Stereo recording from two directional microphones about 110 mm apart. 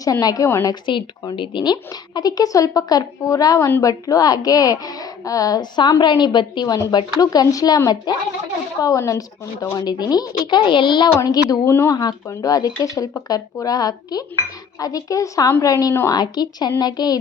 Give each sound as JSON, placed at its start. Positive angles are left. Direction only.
{"t": 0.0, "sound": "a woman's voice", "side_deg": 35}
{"t": 0.7, "sound": "a woman's voice", "side_deg": 45}
{"t": 11.6, "sound": "speech", "side_deg": 25}
{"t": 11.9, "sound": "a woman's voice", "side_deg": 35}